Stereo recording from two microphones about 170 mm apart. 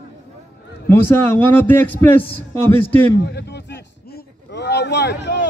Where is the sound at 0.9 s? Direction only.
10° left (ahead or behind).